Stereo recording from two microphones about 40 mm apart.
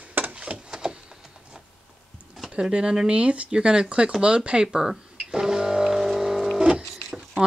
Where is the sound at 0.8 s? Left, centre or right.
Centre.